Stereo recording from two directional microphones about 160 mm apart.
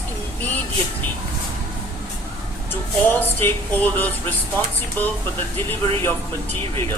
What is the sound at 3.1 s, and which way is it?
Speech, 10° left (ahead or behind).